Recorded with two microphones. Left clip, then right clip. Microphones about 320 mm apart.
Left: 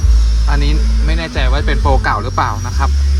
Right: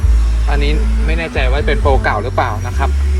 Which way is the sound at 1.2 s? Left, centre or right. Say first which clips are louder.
Right 2 dB; centre.